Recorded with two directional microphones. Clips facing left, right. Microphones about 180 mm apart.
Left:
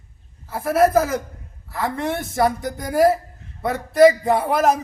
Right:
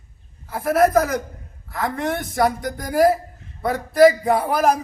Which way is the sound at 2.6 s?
25° left (ahead or behind).